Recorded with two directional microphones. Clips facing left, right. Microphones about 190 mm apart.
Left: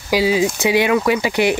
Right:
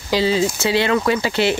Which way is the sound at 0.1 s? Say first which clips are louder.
Left 1 dB; 10° left (ahead or behind).